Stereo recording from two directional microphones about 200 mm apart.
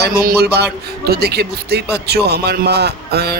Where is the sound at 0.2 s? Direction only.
50° right (ahead or behind).